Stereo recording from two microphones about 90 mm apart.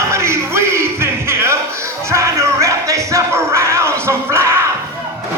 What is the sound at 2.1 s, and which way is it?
Music, 35° right (ahead or behind).